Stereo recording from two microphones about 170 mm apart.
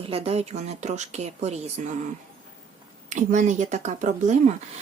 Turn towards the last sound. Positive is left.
turn(degrees=-45)  # may be behind; listen again after turning